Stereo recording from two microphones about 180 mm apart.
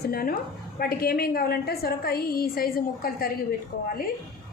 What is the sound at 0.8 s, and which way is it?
A woman's voice, 55° left (ahead or behind).